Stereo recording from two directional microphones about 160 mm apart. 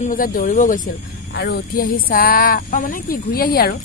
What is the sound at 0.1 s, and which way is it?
Speech, 60° left (ahead or behind).